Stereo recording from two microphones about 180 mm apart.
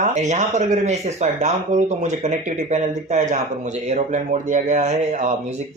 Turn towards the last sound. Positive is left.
turn(degrees=-40)  # may be behind; listen again after turning